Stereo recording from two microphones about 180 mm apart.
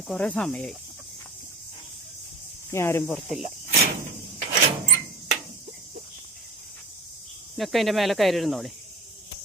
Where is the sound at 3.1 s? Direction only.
Centre (ahead or behind).